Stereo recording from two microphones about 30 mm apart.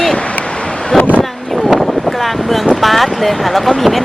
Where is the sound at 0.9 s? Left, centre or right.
Centre.